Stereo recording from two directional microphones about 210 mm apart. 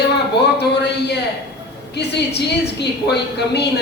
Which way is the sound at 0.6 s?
50° left (ahead or behind).